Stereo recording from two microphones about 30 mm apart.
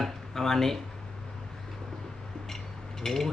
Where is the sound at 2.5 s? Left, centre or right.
Centre.